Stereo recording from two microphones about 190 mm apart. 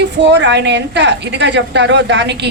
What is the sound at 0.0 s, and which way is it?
A woman's voice, 65° right (ahead or behind).